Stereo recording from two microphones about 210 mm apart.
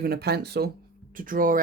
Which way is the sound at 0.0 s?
50° right (ahead or behind).